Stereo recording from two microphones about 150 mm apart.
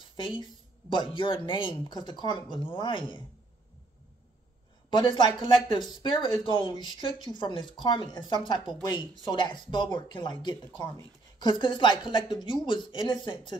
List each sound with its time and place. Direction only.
0.1 s speech: 30° left (ahead or behind)
4.9 s speech: 30° left (ahead or behind)